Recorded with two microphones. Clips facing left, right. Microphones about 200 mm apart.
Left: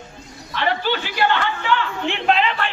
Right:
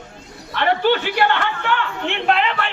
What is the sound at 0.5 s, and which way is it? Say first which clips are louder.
A man's voice: right 5 dB; 60° right (ahead or behind).